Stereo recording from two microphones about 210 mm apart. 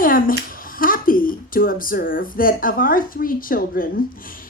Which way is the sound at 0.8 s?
40° left (ahead or behind).